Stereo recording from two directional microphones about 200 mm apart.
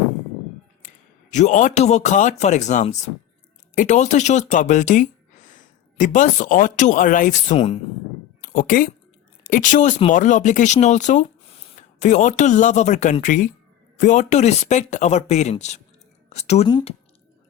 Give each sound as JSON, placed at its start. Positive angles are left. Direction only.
{"t": 1.3, "sound": "speech", "side_deg": 35}
{"t": 8.4, "sound": "speech", "side_deg": 45}